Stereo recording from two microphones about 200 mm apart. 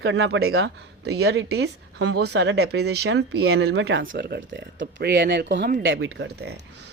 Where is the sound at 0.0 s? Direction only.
55° right (ahead or behind).